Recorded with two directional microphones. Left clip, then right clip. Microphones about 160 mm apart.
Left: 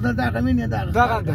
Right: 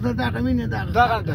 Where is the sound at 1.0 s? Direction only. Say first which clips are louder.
Right 1 dB; 65° left (ahead or behind).